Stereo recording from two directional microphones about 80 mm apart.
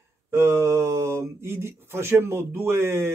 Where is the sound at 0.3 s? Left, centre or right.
Right.